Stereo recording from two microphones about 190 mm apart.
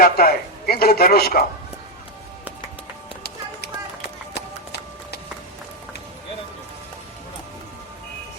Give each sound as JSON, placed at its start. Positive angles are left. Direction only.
{"t": 0.0, "sound": "a man's voice", "side_deg": 55}
{"t": 3.2, "sound": "run", "side_deg": 60}